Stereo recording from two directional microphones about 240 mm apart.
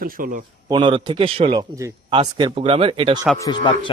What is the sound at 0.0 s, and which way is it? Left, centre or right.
Speech, right.